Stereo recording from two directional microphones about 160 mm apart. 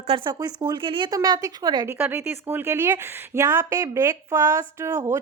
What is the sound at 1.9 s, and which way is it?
Speech, 10° right (ahead or behind).